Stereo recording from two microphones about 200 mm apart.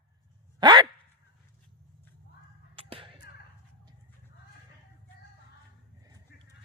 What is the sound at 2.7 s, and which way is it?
Whip, 30° right (ahead or behind).